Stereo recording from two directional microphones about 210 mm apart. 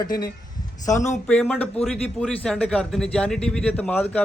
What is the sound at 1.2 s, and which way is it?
A man's voice, 5° left (ahead or behind).